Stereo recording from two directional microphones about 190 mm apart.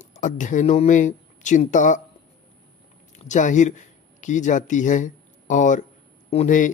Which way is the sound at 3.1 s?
40° left (ahead or behind).